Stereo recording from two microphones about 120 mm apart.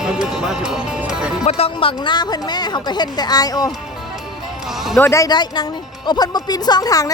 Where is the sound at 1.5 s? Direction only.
55° left (ahead or behind).